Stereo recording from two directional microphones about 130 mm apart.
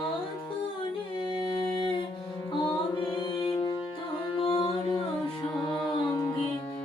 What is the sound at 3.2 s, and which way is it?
Music, 35° left (ahead or behind).